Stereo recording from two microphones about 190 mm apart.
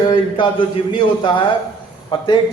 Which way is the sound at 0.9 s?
25° left (ahead or behind).